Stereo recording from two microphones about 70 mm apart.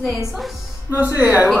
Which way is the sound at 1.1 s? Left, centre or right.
Right.